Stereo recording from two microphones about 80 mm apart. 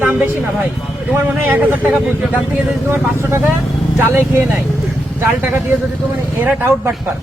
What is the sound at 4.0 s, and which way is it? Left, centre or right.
Speech, right.